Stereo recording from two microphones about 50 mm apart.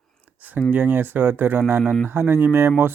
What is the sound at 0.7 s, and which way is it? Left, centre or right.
Speech, right.